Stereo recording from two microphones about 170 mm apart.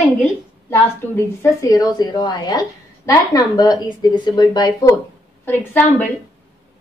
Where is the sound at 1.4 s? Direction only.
20° left (ahead or behind).